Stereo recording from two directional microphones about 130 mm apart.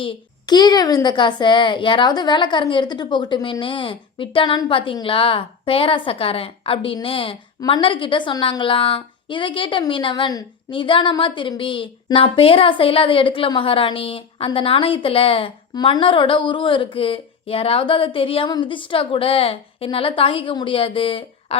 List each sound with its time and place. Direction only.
0.0 s a woman's voice: 40° left (ahead or behind)